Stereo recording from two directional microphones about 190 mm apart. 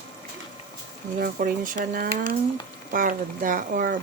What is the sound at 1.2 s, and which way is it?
Speech, 45° right (ahead or behind).